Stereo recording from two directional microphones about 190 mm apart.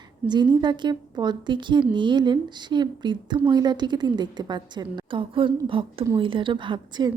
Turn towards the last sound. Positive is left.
turn(degrees=-25)  # may be behind; listen again after turning